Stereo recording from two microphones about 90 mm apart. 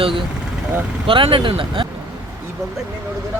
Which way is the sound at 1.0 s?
75° right (ahead or behind).